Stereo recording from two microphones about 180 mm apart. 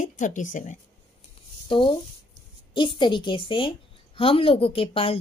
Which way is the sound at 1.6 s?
25° left (ahead or behind).